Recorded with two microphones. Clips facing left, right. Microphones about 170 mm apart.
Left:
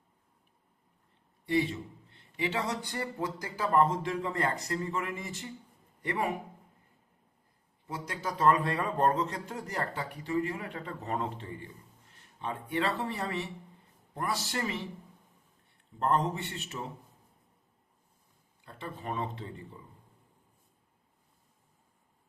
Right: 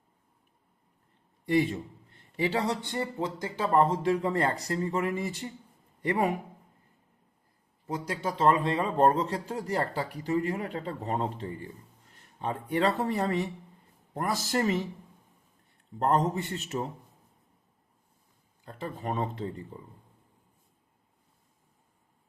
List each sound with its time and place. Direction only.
1.5 s a sound: 45° right (ahead or behind)
2.3 s a man's voice: 35° right (ahead or behind)
8.0 s speech: 30° right (ahead or behind)
16.0 s speech: 40° right (ahead or behind)
18.6 s speech: 45° right (ahead or behind)